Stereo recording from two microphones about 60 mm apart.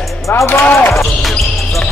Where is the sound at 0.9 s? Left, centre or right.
Centre.